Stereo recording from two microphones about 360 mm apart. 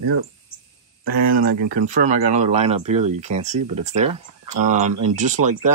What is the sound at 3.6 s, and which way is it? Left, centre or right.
Speech, right.